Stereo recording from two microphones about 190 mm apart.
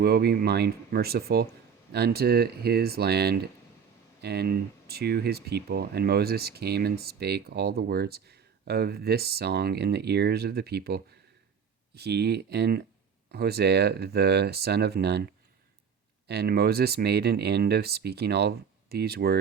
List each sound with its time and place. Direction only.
0.0 s speech: 55° right (ahead or behind)
16.2 s speech: 60° right (ahead or behind)